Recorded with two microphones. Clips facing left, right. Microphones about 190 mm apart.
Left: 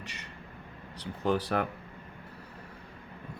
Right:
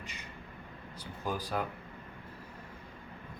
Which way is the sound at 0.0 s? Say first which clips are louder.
Left 2 dB; 75° left (ahead or behind).